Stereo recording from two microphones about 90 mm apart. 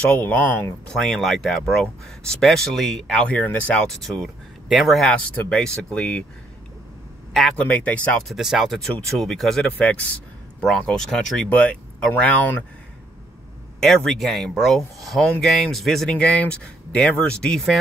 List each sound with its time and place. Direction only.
0.2 s speech: 20° left (ahead or behind)
0.8 s speech: 5° left (ahead or behind)
3.8 s speech: 5° left (ahead or behind)
5.1 s speech: 15° left (ahead or behind)
7.3 s speech: 5° left (ahead or behind)
8.3 s speech: 5° right (ahead or behind); by 10.1 s 15° left (ahead or behind)
10.6 s speech: 5° left (ahead or behind)
13.7 s speech: 5° left (ahead or behind)
16.2 s speech: 15° left (ahead or behind)